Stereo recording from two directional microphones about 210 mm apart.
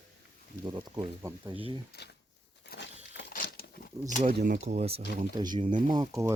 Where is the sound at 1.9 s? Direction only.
50° left (ahead or behind).